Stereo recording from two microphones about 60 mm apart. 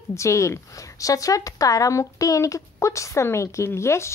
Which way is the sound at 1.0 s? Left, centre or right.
Left.